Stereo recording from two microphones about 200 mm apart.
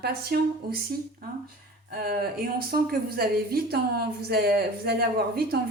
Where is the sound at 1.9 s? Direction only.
50° right (ahead or behind).